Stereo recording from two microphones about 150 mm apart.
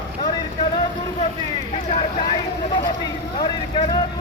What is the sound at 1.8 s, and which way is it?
Vehicle, 40° left (ahead or behind).